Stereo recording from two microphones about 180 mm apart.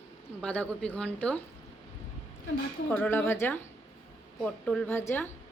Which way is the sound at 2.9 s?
10° left (ahead or behind).